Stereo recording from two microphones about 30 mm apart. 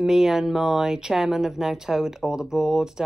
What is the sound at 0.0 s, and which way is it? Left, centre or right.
Speech, centre.